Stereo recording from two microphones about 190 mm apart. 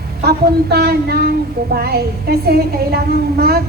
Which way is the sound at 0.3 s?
55° right (ahead or behind).